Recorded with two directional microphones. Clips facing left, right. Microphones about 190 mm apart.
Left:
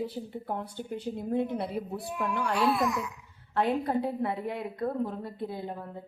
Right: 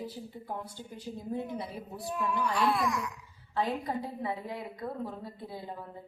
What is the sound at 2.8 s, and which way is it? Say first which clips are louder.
Laughter: left 3 dB; 25° left (ahead or behind).